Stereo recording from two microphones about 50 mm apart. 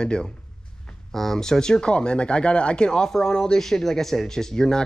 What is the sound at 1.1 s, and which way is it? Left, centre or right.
Speech, centre.